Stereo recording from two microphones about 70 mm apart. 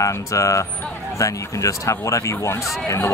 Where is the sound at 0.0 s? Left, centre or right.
Left.